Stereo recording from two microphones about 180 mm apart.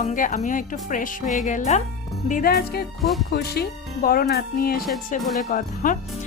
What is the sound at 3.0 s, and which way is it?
Speech, centre (ahead or behind).